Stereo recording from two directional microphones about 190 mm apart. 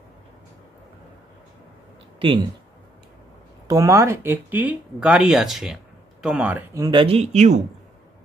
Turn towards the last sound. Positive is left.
turn(degrees=-35)  # may be behind; listen again after turning